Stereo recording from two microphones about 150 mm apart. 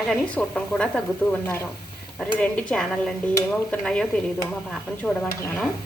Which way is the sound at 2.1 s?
5° left (ahead or behind).